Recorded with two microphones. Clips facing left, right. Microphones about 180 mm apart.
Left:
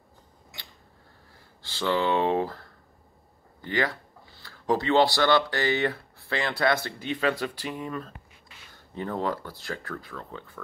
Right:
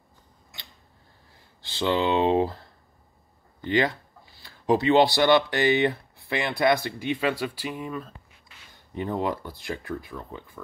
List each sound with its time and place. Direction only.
1.6 s speech: 20° right (ahead or behind)
3.6 s speech: 20° right (ahead or behind)
8.7 s speech: 15° right (ahead or behind)